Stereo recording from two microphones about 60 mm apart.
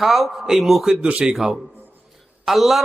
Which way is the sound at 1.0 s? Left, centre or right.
Centre.